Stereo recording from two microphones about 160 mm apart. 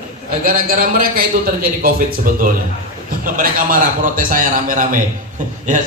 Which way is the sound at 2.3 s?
60° right (ahead or behind).